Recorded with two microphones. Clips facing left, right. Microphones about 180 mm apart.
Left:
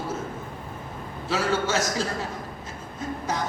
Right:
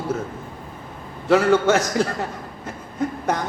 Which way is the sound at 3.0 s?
60° right (ahead or behind).